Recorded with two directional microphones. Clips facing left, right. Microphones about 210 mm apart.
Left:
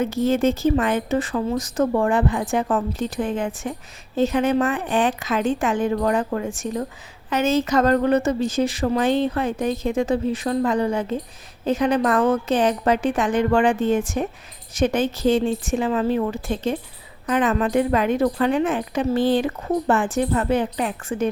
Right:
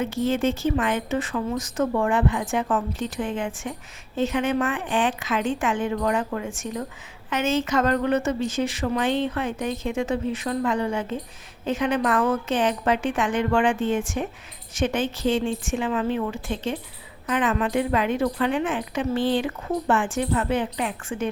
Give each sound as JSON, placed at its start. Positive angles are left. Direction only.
{"t": 0.0, "sound": "a woman's voice", "side_deg": 40}